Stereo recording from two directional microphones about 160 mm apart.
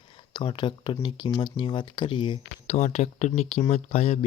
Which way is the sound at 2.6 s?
45° left (ahead or behind).